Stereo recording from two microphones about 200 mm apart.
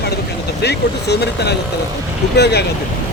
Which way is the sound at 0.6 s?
55° left (ahead or behind).